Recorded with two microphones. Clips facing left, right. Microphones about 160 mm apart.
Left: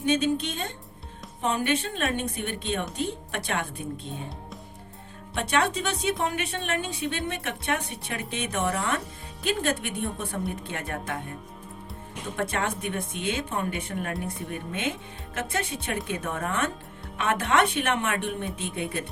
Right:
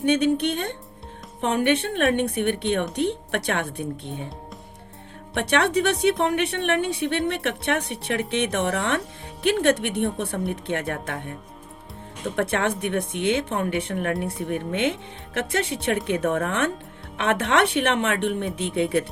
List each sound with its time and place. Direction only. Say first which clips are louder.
0.0 s speech: right 4 dB; 60° right (ahead or behind)
5.3 s speech: right 4 dB; 65° right (ahead or behind)
12.4 s speech: right 5 dB; 70° right (ahead or behind)